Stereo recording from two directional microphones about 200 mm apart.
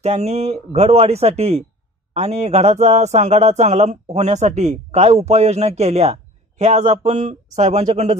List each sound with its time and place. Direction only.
0.0 s speech: 35° right (ahead or behind)